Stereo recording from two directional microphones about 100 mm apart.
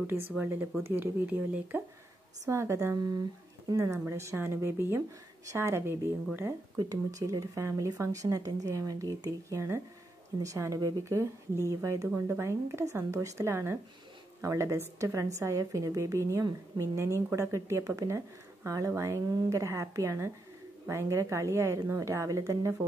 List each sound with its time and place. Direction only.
0.0 s a woman's voice: 25° right (ahead or behind)
2.4 s a woman's voice: 30° right (ahead or behind)
6.8 s a woman's voice: 35° right (ahead or behind)